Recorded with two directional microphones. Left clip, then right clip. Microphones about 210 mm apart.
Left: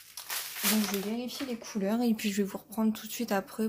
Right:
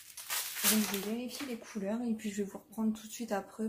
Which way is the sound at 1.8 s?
50° left (ahead or behind).